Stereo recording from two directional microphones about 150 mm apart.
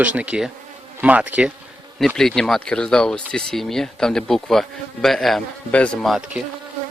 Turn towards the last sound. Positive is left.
turn(degrees=-5)  # may be behind; listen again after turning